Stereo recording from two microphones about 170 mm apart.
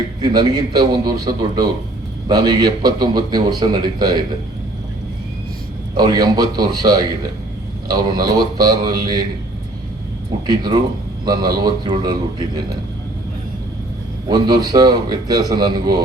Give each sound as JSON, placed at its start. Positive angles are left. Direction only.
{"t": 0.2, "sound": "a man's voice", "side_deg": -25}
{"t": 5.9, "sound": "a man's voice", "side_deg": -25}
{"t": 10.4, "sound": "a man's voice", "side_deg": -25}
{"t": 14.3, "sound": "a man's voice", "side_deg": -25}